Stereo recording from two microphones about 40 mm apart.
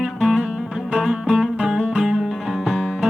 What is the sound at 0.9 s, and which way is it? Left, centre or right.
Music, right.